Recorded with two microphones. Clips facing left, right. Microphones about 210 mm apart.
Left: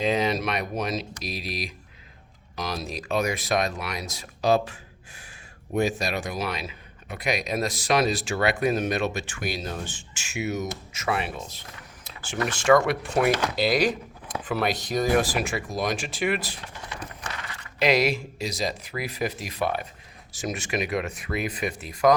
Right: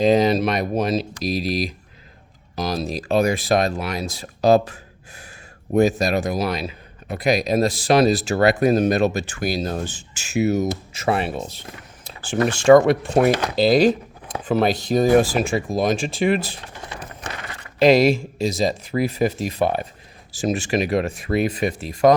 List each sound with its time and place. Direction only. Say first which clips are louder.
0.0 s speech: right 8 dB; 35° right (ahead or behind)